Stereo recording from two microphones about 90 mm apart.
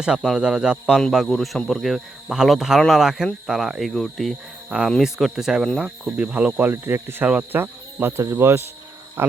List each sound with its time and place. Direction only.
0.0 s a man's voice: 5° right (ahead or behind); by 7.3 s 25° right (ahead or behind)
7.3 s a man's voice: 15° right (ahead or behind)
8.0 s speech: 30° right (ahead or behind)